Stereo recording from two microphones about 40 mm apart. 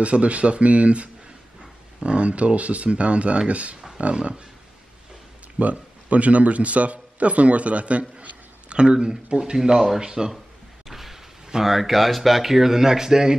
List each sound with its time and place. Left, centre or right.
0.0 s speech: right
5.6 s a man's voice: right; by 10.3 s centre
10.9 s speech: centre